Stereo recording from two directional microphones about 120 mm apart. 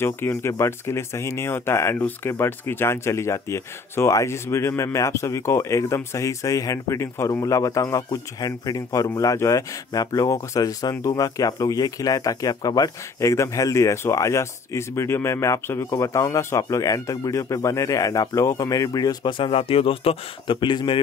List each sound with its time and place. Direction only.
0.0 s speech: 20° left (ahead or behind); by 21.0 s 40° left (ahead or behind)